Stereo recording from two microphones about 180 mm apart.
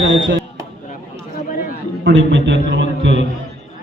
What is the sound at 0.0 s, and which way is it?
Speech, 80° right.